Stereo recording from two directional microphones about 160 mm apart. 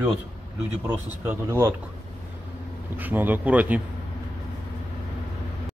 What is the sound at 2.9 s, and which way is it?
Speech, 10° right (ahead or behind).